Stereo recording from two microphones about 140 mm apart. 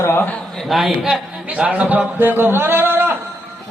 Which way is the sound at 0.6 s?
Centre (ahead or behind).